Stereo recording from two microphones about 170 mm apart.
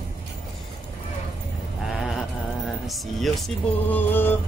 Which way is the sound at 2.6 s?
Centre (ahead or behind).